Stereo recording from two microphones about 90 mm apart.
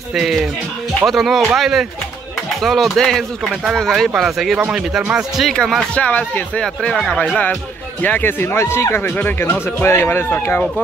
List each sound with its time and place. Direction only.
0.1 s speech: centre (ahead or behind)
5.5 s speech: 5° left (ahead or behind)
6.0 s speech: 15° left (ahead or behind)